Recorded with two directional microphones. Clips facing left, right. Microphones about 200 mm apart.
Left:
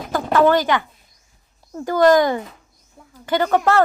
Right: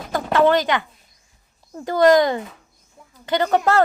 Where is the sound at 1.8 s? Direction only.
20° right (ahead or behind).